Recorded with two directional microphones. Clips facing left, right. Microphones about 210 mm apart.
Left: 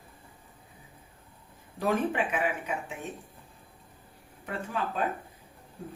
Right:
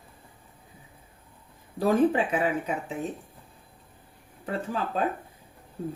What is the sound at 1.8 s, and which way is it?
Speech, 35° right (ahead or behind).